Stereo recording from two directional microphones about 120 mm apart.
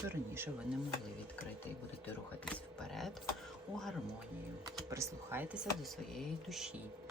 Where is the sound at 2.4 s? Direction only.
5° left (ahead or behind).